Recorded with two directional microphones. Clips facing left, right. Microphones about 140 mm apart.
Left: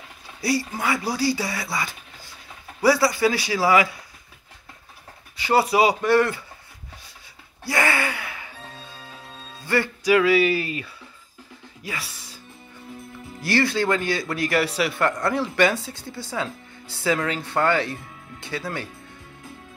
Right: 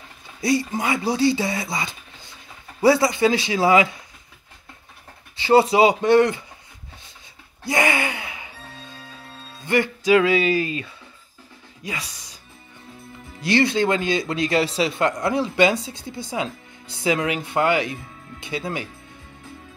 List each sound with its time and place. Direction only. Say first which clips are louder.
0.4 s speech: right 3 dB; 20° right (ahead or behind)
5.4 s speech: right 4 dB; 25° right (ahead or behind)
7.6 s gasp: right 2 dB; 20° right (ahead or behind)
9.6 s music: right 2 dB; 20° right (ahead or behind)
11.8 s speech: right 2 dB; 20° right (ahead or behind)
13.4 s speech: right 3 dB; 20° right (ahead or behind)